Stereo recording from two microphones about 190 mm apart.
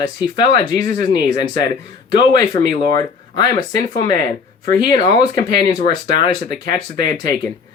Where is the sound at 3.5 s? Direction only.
40° left (ahead or behind).